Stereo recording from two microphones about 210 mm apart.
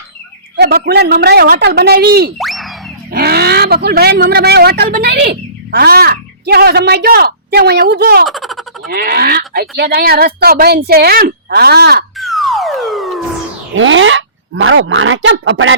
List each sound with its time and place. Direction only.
0.5 s speech: 50° right (ahead or behind)
2.4 s music: centre (ahead or behind)
3.1 s speech: 45° right (ahead or behind)
8.3 s a sound: centre (ahead or behind)
8.9 s speech: 45° right (ahead or behind)
12.1 s a sound: centre (ahead or behind)
13.7 s speech: 65° right (ahead or behind)